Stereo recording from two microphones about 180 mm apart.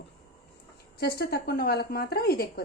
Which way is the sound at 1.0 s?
60° left (ahead or behind).